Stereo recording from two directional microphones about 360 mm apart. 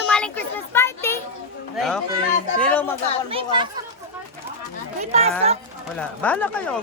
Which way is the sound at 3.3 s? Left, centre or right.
Centre.